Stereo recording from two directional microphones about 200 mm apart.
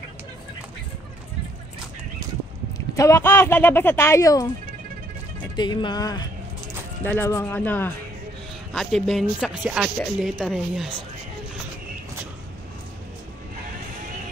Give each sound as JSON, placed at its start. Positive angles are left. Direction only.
{"t": 3.0, "sound": "speech", "side_deg": 15}
{"t": 5.6, "sound": "speech", "side_deg": 20}